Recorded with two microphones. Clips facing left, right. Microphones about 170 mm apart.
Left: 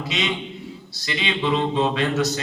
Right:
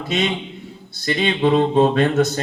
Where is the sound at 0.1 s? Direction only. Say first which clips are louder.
Right 6 dB; 55° right (ahead or behind).